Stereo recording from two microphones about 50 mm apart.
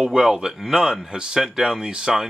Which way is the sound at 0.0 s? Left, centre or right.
Centre.